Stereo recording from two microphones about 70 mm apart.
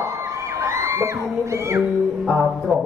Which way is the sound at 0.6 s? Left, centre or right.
Right.